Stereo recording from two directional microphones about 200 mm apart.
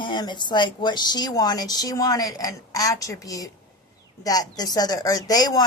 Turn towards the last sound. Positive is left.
turn(degrees=20)  # may be behind; listen again after turning